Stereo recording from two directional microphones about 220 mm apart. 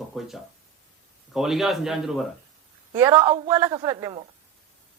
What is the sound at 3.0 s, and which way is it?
Speech, 15° right (ahead or behind).